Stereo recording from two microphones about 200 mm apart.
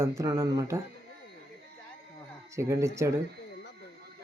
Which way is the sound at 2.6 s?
15° right (ahead or behind).